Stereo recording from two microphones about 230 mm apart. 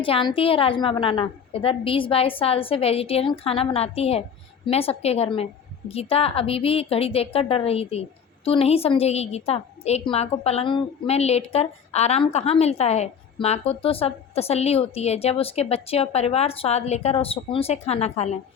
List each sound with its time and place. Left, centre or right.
0.0 s a woman's voice: left